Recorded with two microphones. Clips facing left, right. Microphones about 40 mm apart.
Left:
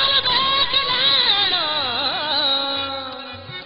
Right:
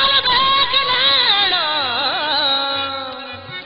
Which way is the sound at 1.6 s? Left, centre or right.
Centre.